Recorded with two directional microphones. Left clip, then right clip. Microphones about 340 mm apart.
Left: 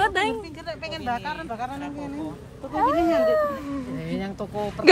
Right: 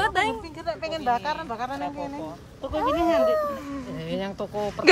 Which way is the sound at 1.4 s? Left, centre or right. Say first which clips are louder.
Even; centre.